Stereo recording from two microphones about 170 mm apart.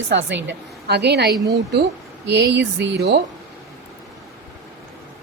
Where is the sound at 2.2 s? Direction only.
90° right.